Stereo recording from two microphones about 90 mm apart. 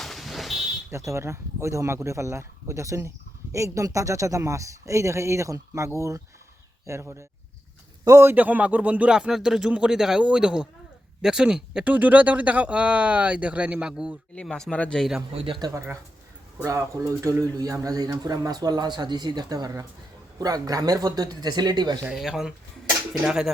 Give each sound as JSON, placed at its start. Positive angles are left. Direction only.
{"t": 0.0, "sound": "a sound", "side_deg": 0}
{"t": 0.9, "sound": "speech", "side_deg": -30}
{"t": 14.7, "sound": "speech", "side_deg": 10}
{"t": 15.4, "sound": "speech", "side_deg": -75}
{"t": 16.6, "sound": "speech", "side_deg": -35}
{"t": 22.1, "sound": "speech", "side_deg": -5}